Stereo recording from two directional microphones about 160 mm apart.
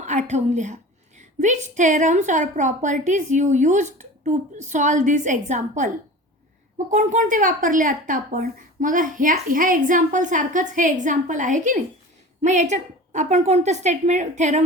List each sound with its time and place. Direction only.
0.0 s speech: 45° right (ahead or behind)
6.9 s speech: 50° right (ahead or behind)